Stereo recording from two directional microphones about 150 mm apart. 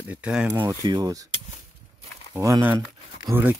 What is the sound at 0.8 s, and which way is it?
Speech, 25° right (ahead or behind).